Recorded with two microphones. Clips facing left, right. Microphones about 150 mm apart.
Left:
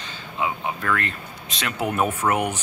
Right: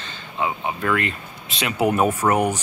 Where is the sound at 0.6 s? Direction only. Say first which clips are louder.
Right 3 dB; 5° right (ahead or behind).